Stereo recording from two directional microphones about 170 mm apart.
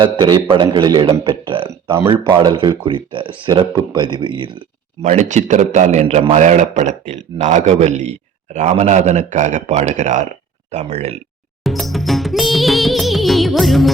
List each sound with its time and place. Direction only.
0.0 s speech: 30° right (ahead or behind)
5.0 s a man's voice: 45° right (ahead or behind)
11.6 s music: centre (ahead or behind)